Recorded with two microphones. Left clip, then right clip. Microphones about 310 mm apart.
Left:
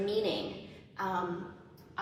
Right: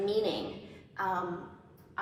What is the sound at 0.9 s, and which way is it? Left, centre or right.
Speech, centre.